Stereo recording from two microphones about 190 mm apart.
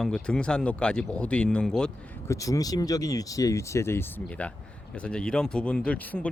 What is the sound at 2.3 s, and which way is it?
Speech, 15° left (ahead or behind).